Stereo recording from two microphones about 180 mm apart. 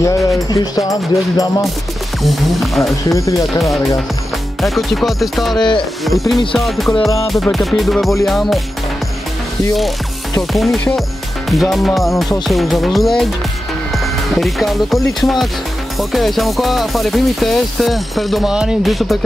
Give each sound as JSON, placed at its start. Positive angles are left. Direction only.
{"t": 0.0, "sound": "music", "side_deg": 20}
{"t": 2.2, "sound": "speech", "side_deg": 0}
{"t": 3.1, "sound": "speech", "side_deg": 15}
{"t": 4.6, "sound": "speech", "side_deg": 0}
{"t": 5.6, "sound": "music", "side_deg": 25}
{"t": 6.0, "sound": "speech", "side_deg": 0}
{"t": 10.5, "sound": "speech", "side_deg": 0}